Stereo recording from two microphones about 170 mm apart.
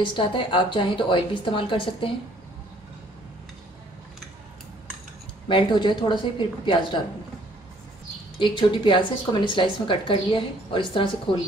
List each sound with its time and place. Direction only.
0.0 s speech: 30° left (ahead or behind)
5.5 s speech: 30° left (ahead or behind)
8.4 s speech: 30° left (ahead or behind)